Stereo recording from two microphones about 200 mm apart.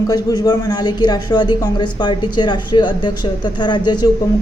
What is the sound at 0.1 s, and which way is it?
Speech, 20° left (ahead or behind).